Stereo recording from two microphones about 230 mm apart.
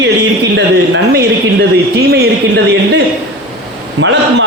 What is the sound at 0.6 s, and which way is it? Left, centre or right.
A man's voice, right.